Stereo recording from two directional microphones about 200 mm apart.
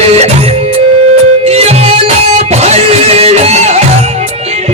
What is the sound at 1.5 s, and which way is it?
Music, 30° right (ahead or behind).